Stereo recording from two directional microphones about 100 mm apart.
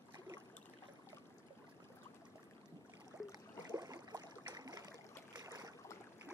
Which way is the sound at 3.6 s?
35° right (ahead or behind).